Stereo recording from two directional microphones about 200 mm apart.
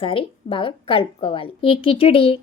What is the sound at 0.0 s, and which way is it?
A woman's voice, 25° left (ahead or behind).